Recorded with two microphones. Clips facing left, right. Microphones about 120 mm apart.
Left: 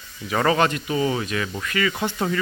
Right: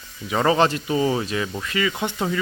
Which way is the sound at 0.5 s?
30° right (ahead or behind).